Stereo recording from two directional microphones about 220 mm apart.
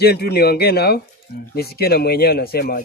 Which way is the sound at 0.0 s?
45° left (ahead or behind).